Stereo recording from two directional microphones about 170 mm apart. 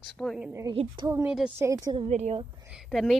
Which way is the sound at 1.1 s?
15° right (ahead or behind).